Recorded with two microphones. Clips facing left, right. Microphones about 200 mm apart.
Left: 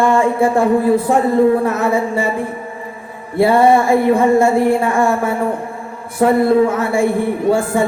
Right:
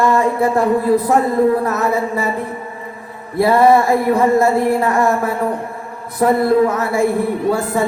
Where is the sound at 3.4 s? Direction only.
25° left (ahead or behind).